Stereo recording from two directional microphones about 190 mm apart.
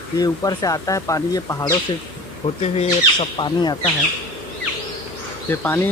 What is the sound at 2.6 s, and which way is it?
Speech, 35° left (ahead or behind).